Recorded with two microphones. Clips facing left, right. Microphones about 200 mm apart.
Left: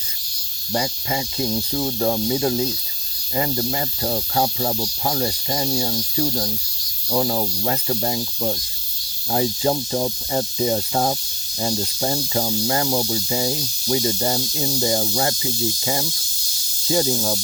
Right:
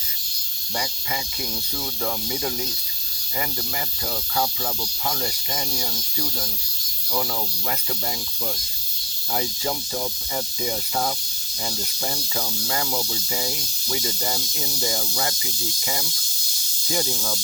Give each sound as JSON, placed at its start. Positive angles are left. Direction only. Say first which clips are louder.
{"t": 0.7, "sound": "speech", "louder": "left 7 dB", "side_deg": 30}